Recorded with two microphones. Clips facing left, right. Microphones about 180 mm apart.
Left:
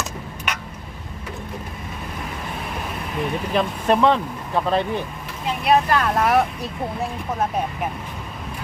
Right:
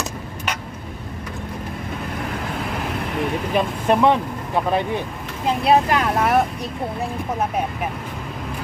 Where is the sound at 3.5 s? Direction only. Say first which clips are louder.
Even; 15° right (ahead or behind).